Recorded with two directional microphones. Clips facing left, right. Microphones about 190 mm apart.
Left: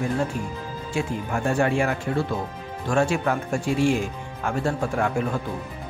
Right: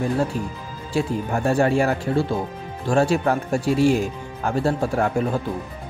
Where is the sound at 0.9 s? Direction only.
35° right (ahead or behind).